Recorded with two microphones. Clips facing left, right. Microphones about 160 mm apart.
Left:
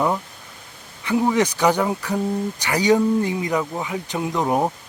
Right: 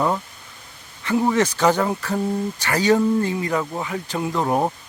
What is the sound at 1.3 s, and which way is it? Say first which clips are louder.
A man's voice: right 1 dB; 15° left (ahead or behind).